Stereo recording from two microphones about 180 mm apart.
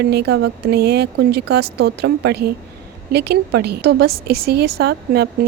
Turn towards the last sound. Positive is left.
turn(degrees=-60)  # may be behind; listen again after turning